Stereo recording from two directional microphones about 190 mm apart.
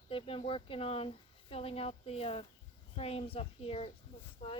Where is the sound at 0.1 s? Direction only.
30° left (ahead or behind).